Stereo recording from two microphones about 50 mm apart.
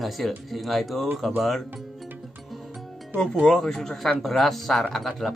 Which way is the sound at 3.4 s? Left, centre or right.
Centre.